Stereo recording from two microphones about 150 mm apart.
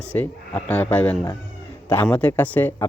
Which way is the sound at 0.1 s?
10° left (ahead or behind).